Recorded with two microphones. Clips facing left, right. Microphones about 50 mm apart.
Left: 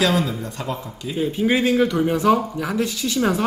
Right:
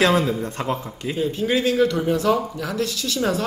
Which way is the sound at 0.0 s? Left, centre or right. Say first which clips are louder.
Right 2 dB; right.